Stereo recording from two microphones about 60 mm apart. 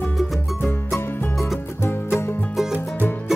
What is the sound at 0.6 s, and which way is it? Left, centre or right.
Music, left.